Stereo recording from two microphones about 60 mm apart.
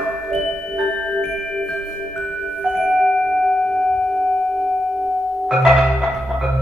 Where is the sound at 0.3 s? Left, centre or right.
Centre.